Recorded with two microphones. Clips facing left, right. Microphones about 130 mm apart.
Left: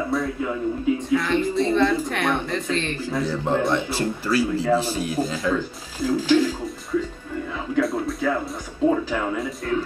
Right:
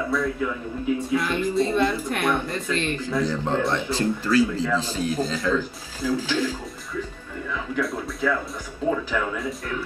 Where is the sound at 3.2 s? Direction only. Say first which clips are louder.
Left 4 dB; 15° left (ahead or behind).